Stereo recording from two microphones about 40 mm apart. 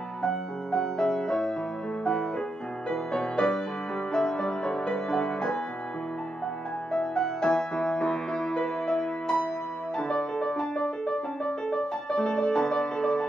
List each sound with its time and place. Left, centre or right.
0.2 s music: centre
2.9 s music: centre
6.9 s music: centre